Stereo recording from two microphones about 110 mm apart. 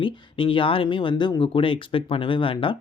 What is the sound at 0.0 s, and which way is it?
Speech, 50° left (ahead or behind).